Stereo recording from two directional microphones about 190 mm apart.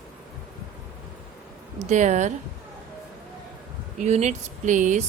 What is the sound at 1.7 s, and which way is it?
Speech, 40° right (ahead or behind).